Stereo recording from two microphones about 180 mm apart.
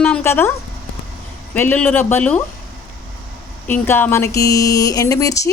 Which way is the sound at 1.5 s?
10° left (ahead or behind).